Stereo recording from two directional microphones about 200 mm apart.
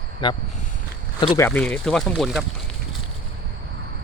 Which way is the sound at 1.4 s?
10° left (ahead or behind).